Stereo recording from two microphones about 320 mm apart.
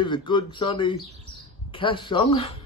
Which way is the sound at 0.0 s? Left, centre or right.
Centre.